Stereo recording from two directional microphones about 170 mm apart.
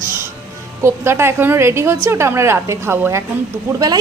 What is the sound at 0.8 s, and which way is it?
A woman's voice, 15° right (ahead or behind).